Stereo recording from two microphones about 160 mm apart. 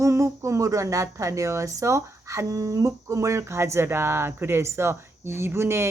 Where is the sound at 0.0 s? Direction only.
20° right (ahead or behind).